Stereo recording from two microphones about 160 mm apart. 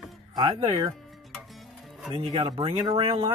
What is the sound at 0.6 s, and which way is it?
Speech, 35° right (ahead or behind).